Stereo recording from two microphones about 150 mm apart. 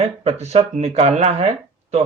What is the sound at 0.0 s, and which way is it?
Speech, 45° right (ahead or behind).